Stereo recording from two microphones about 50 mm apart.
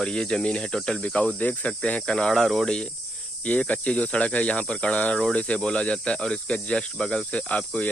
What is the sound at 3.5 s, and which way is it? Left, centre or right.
Speech, left.